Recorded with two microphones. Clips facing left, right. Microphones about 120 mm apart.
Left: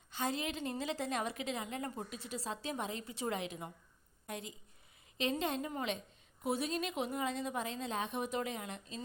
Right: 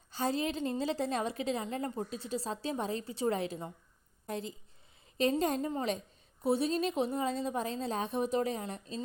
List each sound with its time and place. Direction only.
0.1 s a woman's voice: 35° right (ahead or behind)